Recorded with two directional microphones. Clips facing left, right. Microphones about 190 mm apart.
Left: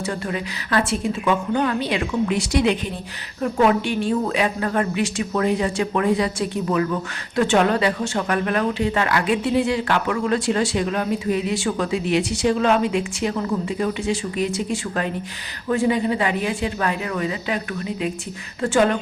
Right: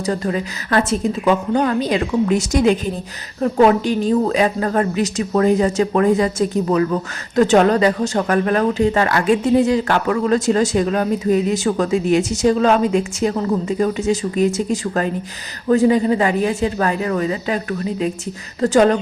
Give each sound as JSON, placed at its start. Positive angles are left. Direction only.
{"t": 0.0, "sound": "speech", "side_deg": -35}